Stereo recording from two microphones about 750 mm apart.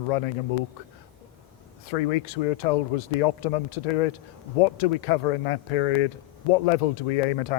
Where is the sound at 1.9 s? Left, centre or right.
Left.